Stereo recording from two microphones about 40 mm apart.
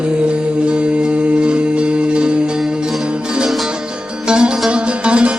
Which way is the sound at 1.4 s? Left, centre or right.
Right.